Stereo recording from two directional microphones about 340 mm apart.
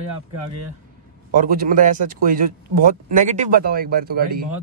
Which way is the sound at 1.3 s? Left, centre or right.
Right.